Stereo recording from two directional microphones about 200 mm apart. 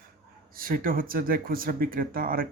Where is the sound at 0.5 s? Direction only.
45° right (ahead or behind).